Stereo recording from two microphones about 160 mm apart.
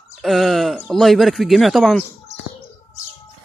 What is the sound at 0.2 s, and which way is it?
Speech, centre (ahead or behind).